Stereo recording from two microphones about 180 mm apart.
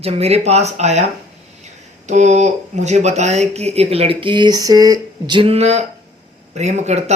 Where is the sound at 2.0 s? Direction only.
40° right (ahead or behind).